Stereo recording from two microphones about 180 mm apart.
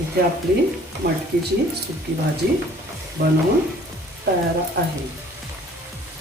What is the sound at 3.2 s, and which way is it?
Frying, 55° right (ahead or behind).